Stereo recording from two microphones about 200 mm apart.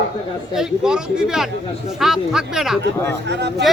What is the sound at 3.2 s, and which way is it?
Speech, 60° right (ahead or behind).